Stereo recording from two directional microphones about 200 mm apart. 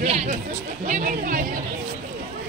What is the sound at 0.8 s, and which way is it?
Chatter, 40° right (ahead or behind).